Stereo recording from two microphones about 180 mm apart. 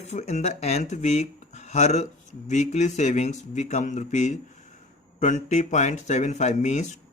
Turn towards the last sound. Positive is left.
turn(degrees=40)  # may be behind; listen again after turning